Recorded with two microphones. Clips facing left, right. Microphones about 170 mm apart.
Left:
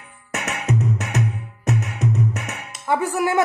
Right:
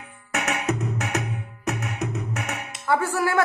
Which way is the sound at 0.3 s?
55° right (ahead or behind).